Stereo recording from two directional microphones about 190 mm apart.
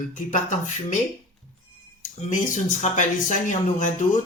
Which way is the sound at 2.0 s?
40° left (ahead or behind).